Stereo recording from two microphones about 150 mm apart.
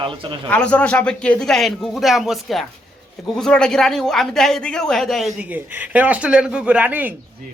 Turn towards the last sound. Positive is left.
turn(degrees=-10)  # may be behind; listen again after turning